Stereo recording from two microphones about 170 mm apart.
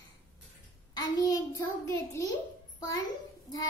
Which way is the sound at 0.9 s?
20° left (ahead or behind).